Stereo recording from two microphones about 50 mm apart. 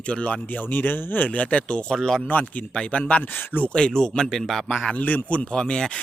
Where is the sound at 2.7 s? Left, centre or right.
Left.